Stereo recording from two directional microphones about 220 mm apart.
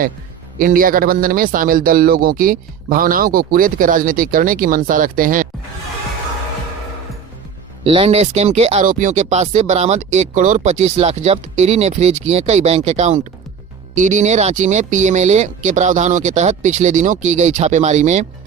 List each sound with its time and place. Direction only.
0.6 s speech: 40° right (ahead or behind)
7.9 s speech: 25° right (ahead or behind)